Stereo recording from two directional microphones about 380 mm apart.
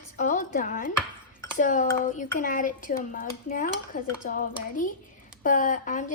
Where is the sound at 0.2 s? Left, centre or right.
Centre.